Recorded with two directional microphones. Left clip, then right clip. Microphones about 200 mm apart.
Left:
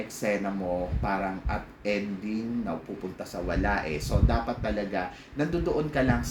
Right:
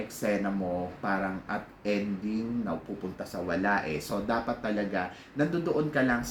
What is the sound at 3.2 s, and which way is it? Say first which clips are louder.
Speech: even; 5° left (ahead or behind).